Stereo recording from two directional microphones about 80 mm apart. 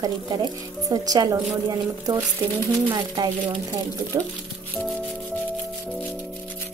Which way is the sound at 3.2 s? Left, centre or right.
Right.